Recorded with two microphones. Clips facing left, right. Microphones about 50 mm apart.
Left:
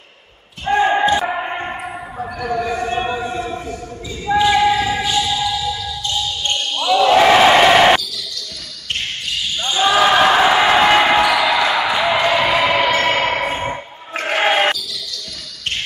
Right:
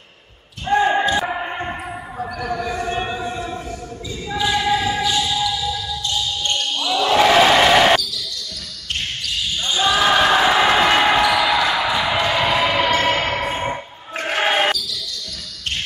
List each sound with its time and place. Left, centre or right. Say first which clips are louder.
0.7 s basketball bounce: left 2 dB; centre
2.4 s a sound: left 4 dB; centre
4.3 s basketball bounce: left 6 dB; left
4.7 s music: left 1 dB; centre
6.4 s basketball bounce: left 4 dB; left
7.0 s basketball bounce: left 3 dB; centre
9.6 s basketball bounce: left 4 dB; left